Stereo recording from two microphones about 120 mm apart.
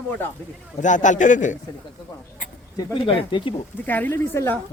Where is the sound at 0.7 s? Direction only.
90° left.